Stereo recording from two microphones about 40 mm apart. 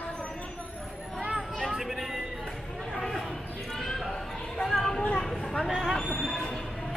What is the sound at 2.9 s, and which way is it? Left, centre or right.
Basketball bounce, centre.